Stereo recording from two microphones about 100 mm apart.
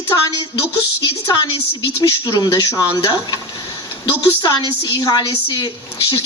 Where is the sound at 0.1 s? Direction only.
40° left (ahead or behind).